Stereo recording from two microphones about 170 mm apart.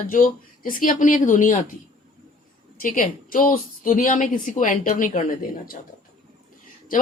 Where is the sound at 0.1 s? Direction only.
55° left (ahead or behind).